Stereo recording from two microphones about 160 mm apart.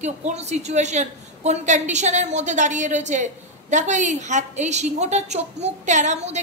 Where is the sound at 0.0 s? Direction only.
45° right (ahead or behind).